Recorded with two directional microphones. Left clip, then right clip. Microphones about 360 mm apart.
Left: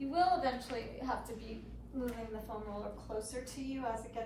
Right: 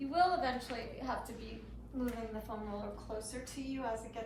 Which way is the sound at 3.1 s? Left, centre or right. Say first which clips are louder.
Left 3 dB; centre.